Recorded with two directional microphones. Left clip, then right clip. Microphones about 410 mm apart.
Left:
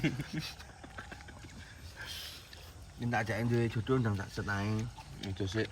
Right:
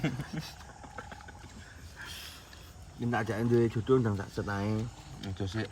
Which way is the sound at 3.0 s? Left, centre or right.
Centre.